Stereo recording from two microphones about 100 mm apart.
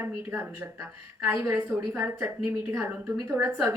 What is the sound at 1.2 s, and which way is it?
A woman's voice, 25° right (ahead or behind).